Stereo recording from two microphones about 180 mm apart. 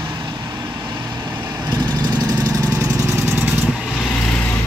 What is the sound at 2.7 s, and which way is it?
Lawn mower, 15° right (ahead or behind).